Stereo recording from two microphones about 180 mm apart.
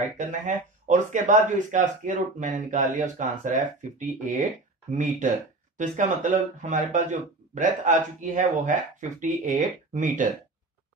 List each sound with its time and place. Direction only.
0.0 s speech: 45° right (ahead or behind)
5.8 s speech: 45° right (ahead or behind)